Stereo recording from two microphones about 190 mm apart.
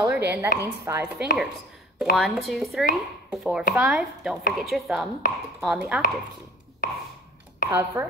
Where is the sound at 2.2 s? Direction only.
Centre (ahead or behind).